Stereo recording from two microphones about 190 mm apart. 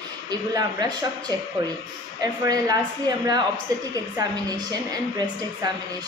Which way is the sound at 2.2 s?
20° right (ahead or behind).